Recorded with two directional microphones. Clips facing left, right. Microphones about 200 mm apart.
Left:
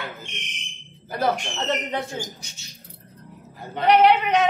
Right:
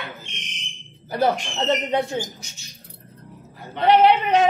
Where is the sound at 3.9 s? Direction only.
30° right (ahead or behind).